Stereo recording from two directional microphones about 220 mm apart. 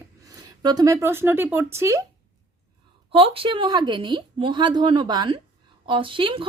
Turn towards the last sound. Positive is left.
turn(degrees=-25)  # may be behind; listen again after turning